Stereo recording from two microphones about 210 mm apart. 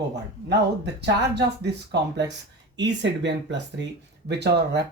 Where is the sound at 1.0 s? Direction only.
55° right (ahead or behind).